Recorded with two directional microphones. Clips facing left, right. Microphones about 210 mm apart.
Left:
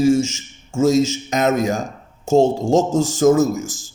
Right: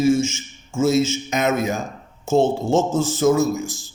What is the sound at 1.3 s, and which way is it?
A man's voice, 40° left (ahead or behind).